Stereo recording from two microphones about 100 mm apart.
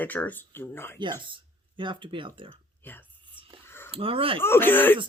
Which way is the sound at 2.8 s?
20° left (ahead or behind).